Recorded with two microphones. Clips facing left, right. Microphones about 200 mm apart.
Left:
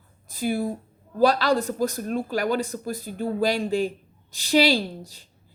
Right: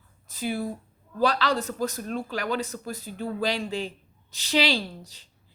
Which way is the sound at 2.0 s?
45° left (ahead or behind).